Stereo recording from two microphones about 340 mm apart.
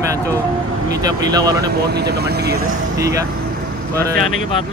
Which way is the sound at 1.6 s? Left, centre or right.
Right.